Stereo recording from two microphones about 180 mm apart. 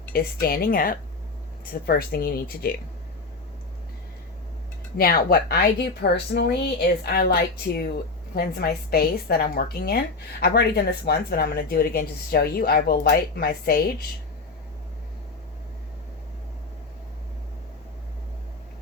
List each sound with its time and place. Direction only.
0.1 s a woman's voice: 55° left (ahead or behind)
4.9 s a woman's voice: 55° left (ahead or behind)